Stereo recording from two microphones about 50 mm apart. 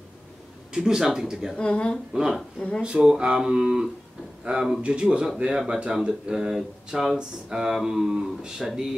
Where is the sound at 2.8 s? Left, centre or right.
Centre.